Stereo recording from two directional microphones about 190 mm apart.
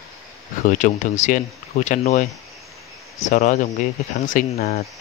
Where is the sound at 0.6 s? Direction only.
40° left (ahead or behind).